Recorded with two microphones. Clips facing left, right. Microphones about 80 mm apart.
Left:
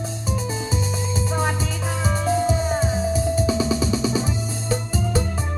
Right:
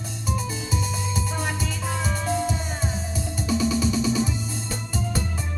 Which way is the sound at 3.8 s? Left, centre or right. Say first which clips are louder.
Left 1 dB; left.